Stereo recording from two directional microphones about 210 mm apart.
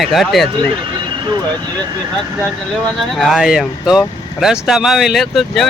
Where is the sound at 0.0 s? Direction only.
Centre (ahead or behind).